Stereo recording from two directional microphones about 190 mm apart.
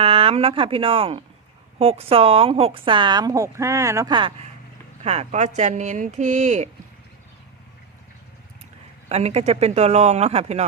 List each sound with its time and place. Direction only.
0.0 s a woman's voice: 30° right (ahead or behind)
9.0 s speech: 35° right (ahead or behind)